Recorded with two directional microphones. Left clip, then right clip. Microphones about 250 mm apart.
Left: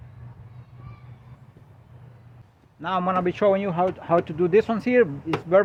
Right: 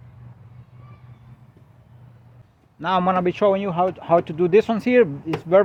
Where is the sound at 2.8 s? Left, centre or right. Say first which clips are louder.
Right 4 dB; right.